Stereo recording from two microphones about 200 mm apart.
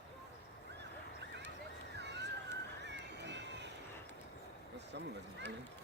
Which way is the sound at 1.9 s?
60° right (ahead or behind).